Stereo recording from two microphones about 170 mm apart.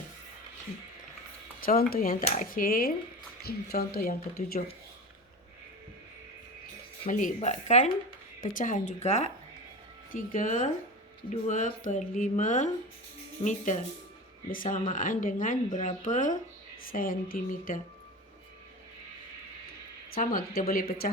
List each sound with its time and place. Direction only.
1.6 s a woman's voice: 60° left (ahead or behind)
2.2 s a woman's voice: 45° left (ahead or behind); by 4.6 s 60° left (ahead or behind)
7.1 s a woman's voice: 50° left (ahead or behind)
20.1 s a woman's voice: 55° left (ahead or behind)